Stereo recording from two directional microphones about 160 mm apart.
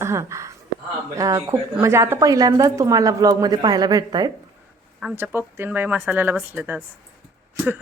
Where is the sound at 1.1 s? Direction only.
20° right (ahead or behind).